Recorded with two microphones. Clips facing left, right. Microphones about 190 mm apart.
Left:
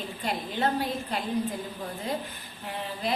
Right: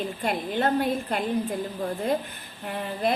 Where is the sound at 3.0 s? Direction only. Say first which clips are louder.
Right 5 dB; 55° right (ahead or behind).